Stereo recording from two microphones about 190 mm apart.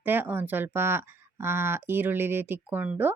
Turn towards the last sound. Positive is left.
turn(degrees=-10)  # may be behind; listen again after turning